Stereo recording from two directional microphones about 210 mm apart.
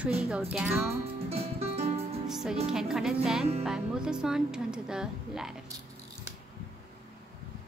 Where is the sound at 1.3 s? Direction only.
30° right (ahead or behind).